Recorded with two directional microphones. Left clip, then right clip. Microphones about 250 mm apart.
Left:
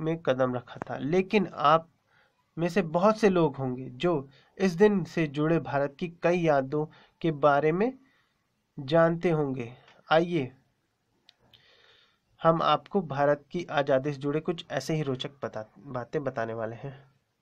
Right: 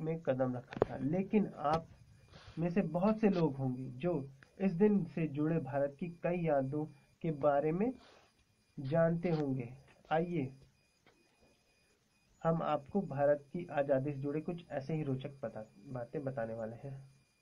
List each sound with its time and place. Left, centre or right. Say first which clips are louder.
0.0 s speech: left 8 dB; left
12.4 s speech: left 11 dB; left